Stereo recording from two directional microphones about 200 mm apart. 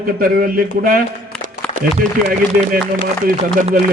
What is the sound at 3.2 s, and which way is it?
Speech, 40° right (ahead or behind).